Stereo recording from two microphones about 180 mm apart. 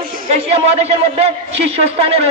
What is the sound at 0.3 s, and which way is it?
Speech, 35° right (ahead or behind).